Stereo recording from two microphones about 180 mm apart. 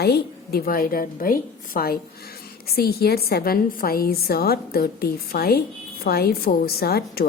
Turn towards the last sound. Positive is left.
turn(degrees=60)  # may be behind; listen again after turning